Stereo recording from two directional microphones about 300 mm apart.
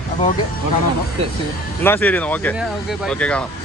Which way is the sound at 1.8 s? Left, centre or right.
Centre.